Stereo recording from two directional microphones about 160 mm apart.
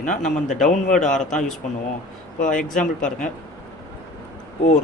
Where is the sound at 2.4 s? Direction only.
55° left (ahead or behind).